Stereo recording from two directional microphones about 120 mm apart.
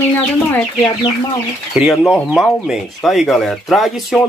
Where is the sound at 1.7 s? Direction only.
10° right (ahead or behind).